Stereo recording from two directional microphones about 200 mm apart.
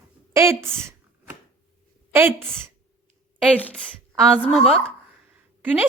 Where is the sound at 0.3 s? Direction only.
15° right (ahead or behind).